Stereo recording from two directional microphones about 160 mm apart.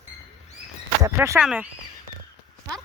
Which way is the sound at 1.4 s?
5° right (ahead or behind).